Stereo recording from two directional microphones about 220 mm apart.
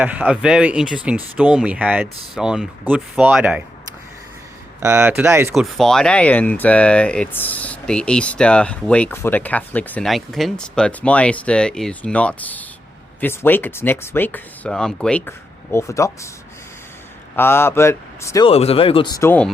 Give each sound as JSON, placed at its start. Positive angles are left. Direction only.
{"t": 0.0, "sound": "speech", "side_deg": -5}
{"t": 4.8, "sound": "speech", "side_deg": -10}
{"t": 5.7, "sound": "speech", "side_deg": 0}
{"t": 17.3, "sound": "speech", "side_deg": 10}
{"t": 18.4, "sound": "speech", "side_deg": 25}